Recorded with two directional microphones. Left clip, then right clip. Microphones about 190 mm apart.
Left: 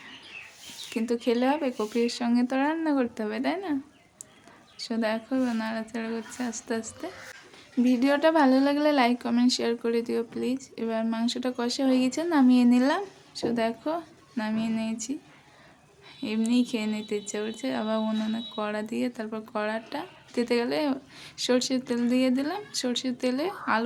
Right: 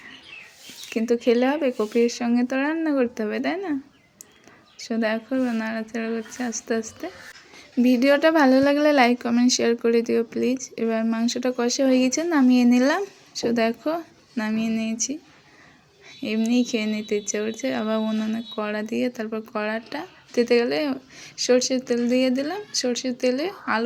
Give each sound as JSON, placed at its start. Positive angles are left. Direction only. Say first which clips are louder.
{"t": 0.9, "sound": "speech", "louder": "right 6 dB", "side_deg": -15}
{"t": 4.8, "sound": "speech", "louder": "right 4 dB", "side_deg": -15}
{"t": 7.9, "sound": "speech", "louder": "right 5 dB", "side_deg": -15}
{"t": 16.2, "sound": "speech", "louder": "right 4 dB", "side_deg": -10}